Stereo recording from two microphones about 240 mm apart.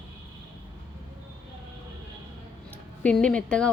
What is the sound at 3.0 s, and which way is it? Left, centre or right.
Speech, centre.